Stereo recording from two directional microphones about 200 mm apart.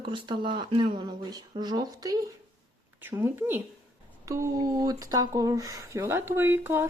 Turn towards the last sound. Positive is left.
turn(degrees=-10)  # may be behind; listen again after turning